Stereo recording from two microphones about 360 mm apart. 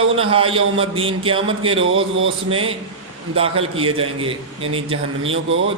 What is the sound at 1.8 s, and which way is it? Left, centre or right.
Speech, right.